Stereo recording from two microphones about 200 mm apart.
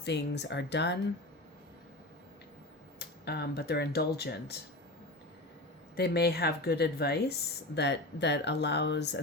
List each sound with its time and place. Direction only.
0.0 s speech: 60° left (ahead or behind)
3.0 s speech: 55° left (ahead or behind)
6.0 s speech: 55° left (ahead or behind)